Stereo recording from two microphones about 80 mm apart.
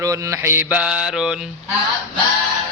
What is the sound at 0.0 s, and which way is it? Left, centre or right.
Mantra, right.